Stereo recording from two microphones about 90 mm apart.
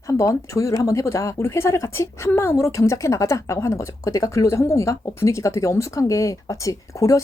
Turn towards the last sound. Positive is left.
turn(degrees=40)  # may be behind; listen again after turning